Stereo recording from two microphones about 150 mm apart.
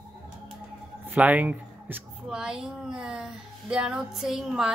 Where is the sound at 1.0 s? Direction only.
10° right (ahead or behind).